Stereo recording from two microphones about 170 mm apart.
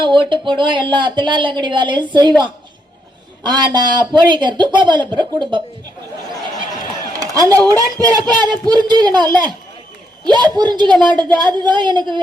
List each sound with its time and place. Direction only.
0.0 s a man's voice: 30° right (ahead or behind)
7.2 s a man's voice: 20° right (ahead or behind)